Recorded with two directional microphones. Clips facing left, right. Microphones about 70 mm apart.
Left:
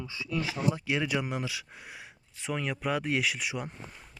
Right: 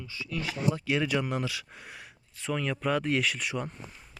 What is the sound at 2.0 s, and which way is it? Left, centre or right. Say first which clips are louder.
Speech: even; centre.